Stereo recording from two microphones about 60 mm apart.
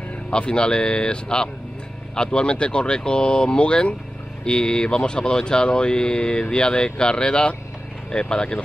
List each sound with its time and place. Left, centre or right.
0.3 s speech: centre